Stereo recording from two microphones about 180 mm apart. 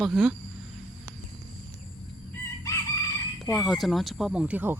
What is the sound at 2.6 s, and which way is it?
Chicken, 20° left (ahead or behind).